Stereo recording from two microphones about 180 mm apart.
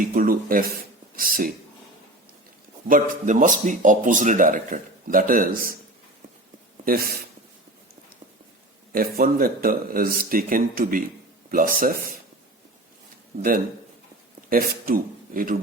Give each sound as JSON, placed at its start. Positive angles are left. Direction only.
{"t": 0.1, "sound": "speech", "side_deg": -50}
{"t": 2.8, "sound": "speech", "side_deg": -45}
{"t": 6.8, "sound": "speech", "side_deg": -55}
{"t": 8.9, "sound": "speech", "side_deg": -55}
{"t": 14.5, "sound": "speech", "side_deg": -55}